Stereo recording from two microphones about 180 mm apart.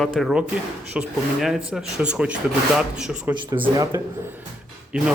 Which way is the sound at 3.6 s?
20° right (ahead or behind).